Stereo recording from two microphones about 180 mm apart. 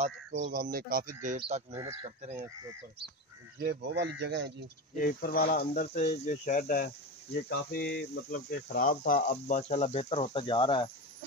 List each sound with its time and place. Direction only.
0.0 s speech: 50° right (ahead or behind)
3.5 s speech: 70° right (ahead or behind)
4.9 s speech: 55° left (ahead or behind)
5.7 s speech: 40° left (ahead or behind)
7.4 s speech: 65° left (ahead or behind); by 9.2 s 50° left (ahead or behind)
9.3 s speech: 40° left (ahead or behind)